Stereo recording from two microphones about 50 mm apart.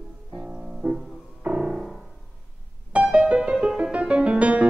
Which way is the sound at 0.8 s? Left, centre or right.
Right.